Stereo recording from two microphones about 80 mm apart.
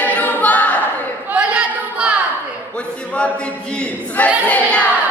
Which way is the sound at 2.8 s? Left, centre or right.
Centre.